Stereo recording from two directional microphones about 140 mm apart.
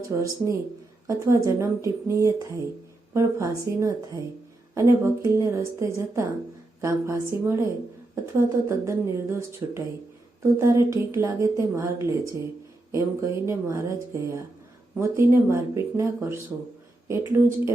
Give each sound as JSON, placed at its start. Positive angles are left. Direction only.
{"t": 0.2, "sound": "a woman's voice", "side_deg": -25}